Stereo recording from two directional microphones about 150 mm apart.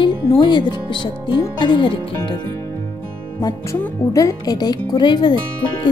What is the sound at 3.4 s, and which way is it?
Speech, 20° left (ahead or behind).